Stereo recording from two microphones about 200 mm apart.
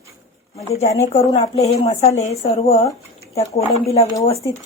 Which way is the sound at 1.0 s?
35° left (ahead or behind).